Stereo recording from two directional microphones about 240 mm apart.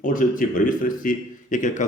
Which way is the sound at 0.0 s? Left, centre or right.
Left.